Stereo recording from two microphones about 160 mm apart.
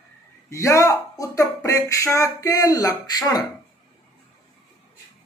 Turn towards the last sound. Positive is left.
turn(degrees=25)  # may be behind; listen again after turning